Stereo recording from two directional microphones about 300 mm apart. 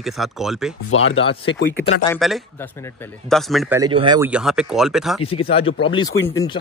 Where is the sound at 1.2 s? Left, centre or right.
Centre.